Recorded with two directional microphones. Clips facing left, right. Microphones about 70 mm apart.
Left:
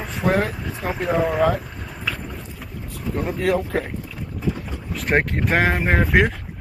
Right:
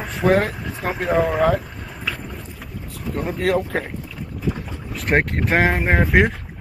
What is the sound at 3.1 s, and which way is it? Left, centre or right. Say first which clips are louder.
Speech: even; centre.